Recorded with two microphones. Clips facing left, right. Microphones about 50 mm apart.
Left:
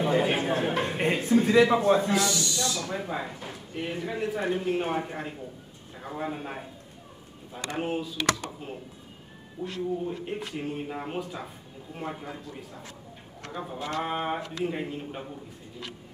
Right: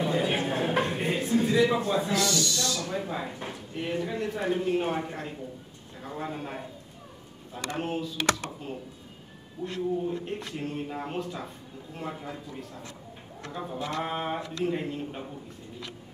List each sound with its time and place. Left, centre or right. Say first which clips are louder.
0.0 s a sound: left 2 dB; left
1.5 s a man's voice: left 4 dB; left
1.8 s a man's voice: left 5 dB; left
2.1 s owl: even; centre
2.9 s speech: even; centre
9.6 s a man's voice: right 1 dB; centre